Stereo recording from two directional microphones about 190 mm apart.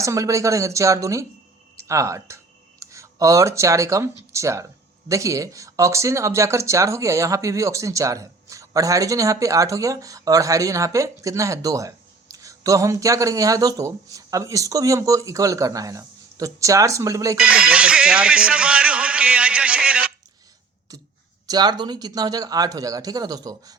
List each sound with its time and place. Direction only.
0.0 s speech: 15° right (ahead or behind)
17.3 s speech: 5° right (ahead or behind)
20.9 s a sound: 20° right (ahead or behind)
21.4 s speech: 20° right (ahead or behind)